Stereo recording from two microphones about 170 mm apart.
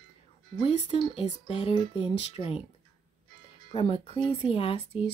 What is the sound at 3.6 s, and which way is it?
Speech, 35° left (ahead or behind).